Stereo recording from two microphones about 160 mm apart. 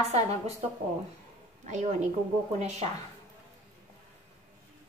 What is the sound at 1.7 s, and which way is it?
Speech, 50° right (ahead or behind).